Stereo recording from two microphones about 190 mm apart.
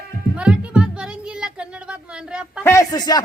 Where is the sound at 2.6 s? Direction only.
15° left (ahead or behind).